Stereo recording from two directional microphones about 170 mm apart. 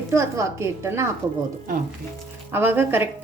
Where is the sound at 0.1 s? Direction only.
15° right (ahead or behind).